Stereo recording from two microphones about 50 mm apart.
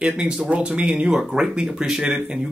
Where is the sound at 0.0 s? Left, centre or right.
Centre.